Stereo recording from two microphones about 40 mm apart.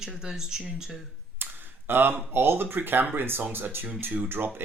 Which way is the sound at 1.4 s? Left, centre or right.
Right.